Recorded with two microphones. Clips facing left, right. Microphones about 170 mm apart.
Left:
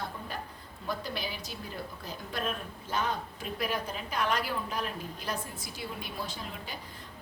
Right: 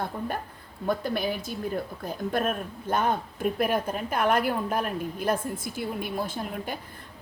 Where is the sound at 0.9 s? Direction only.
50° right (ahead or behind).